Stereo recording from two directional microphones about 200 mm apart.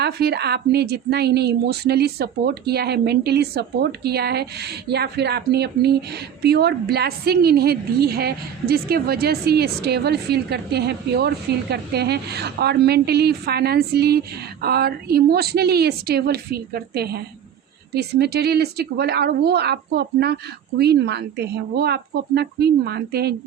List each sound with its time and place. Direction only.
0.0 s a woman's voice: 55° right (ahead or behind)